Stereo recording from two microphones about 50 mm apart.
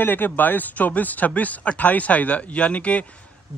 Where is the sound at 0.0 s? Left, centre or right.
Left.